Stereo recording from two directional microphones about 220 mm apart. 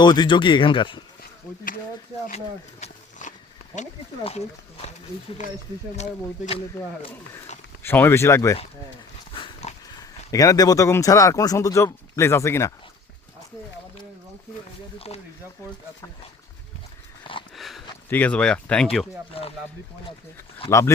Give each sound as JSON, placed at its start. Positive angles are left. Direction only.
{"t": 0.0, "sound": "speech", "side_deg": 20}
{"t": 2.8, "sound": "a sound", "side_deg": 35}
{"t": 3.8, "sound": "speech", "side_deg": 30}
{"t": 6.0, "sound": "speech", "side_deg": 30}
{"t": 7.8, "sound": "a man's voice", "side_deg": 10}
{"t": 9.3, "sound": "dog", "side_deg": 25}
{"t": 10.0, "sound": "a man's voice", "side_deg": 15}
{"t": 14.9, "sound": "speech", "side_deg": 25}
{"t": 17.5, "sound": "a sound", "side_deg": 0}
{"t": 19.3, "sound": "speech", "side_deg": 25}
{"t": 20.7, "sound": "a man's voice", "side_deg": 15}